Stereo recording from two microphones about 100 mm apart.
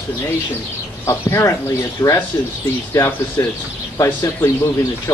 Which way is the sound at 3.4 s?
30° left (ahead or behind).